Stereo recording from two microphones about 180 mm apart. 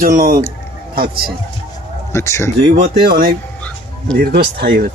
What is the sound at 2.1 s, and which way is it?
Speech, 15° left (ahead or behind).